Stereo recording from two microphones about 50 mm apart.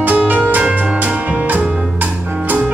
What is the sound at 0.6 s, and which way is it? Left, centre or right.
Music, right.